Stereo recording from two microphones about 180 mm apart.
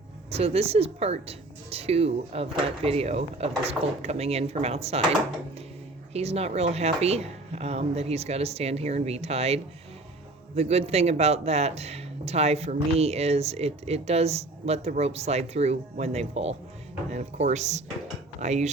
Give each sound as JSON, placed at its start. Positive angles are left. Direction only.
{"t": 0.3, "sound": "speech", "side_deg": -35}
{"t": 6.1, "sound": "speech", "side_deg": -35}